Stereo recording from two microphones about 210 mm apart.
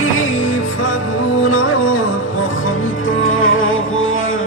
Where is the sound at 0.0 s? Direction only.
75° left (ahead or behind).